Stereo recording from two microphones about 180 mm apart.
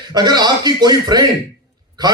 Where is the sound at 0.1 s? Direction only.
25° right (ahead or behind).